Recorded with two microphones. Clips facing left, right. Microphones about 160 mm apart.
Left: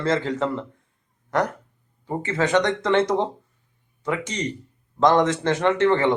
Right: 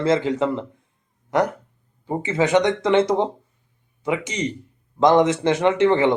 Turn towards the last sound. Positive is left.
turn(degrees=-15)  # may be behind; listen again after turning